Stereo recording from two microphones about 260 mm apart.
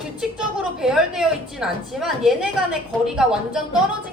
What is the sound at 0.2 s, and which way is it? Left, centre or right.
A woman's voice, centre.